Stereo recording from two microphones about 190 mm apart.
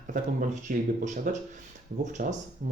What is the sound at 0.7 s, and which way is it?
Speech, 45° right (ahead or behind).